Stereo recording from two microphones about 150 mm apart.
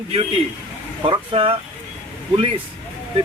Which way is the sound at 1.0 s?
35° right (ahead or behind).